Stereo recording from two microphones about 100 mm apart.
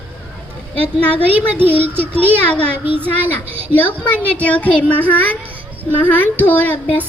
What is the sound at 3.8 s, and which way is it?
Speech, 15° left (ahead or behind).